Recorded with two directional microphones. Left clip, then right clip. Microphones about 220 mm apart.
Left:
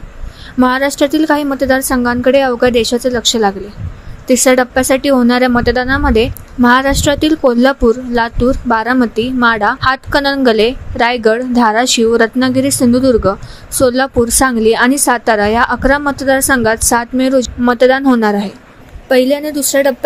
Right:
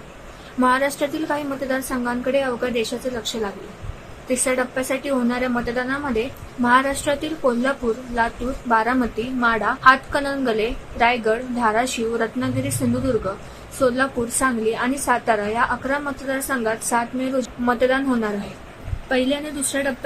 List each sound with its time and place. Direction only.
0.6 s speech: 40° left (ahead or behind)
19.0 s speech: 30° left (ahead or behind)